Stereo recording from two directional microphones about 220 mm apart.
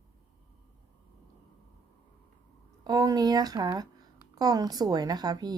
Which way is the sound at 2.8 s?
15° right (ahead or behind).